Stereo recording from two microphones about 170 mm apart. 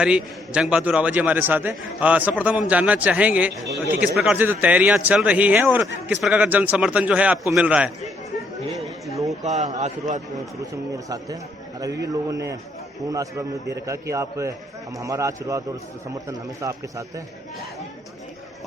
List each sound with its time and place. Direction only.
0.0 s a man's voice: 5° right (ahead or behind)
3.5 s a man's voice: 20° right (ahead or behind)
4.0 s a man's voice: 5° right (ahead or behind)
9.4 s a man's voice: 40° right (ahead or behind)
12.3 s a man's voice: 20° right (ahead or behind)